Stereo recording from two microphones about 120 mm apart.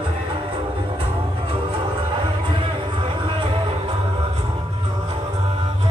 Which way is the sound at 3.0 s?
45° right (ahead or behind).